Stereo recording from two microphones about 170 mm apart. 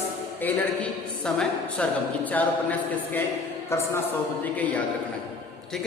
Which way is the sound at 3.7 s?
15° left (ahead or behind).